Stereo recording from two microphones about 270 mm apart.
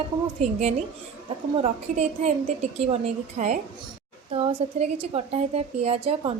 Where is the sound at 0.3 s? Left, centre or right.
Right.